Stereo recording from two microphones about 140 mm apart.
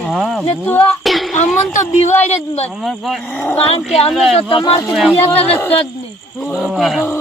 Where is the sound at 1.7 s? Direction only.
60° left (ahead or behind).